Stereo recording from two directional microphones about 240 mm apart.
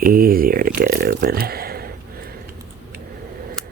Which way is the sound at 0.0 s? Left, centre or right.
Right.